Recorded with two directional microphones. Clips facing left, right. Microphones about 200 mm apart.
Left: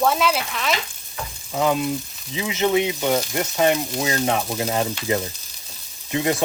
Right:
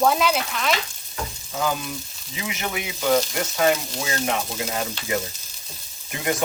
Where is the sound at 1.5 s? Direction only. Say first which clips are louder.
Left 6 dB; 25° left (ahead or behind).